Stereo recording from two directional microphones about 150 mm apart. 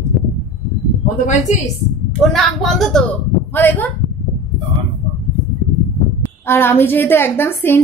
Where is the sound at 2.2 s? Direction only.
Centre (ahead or behind).